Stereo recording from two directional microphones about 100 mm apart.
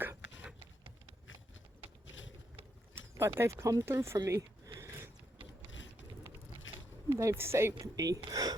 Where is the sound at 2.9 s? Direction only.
25° right (ahead or behind).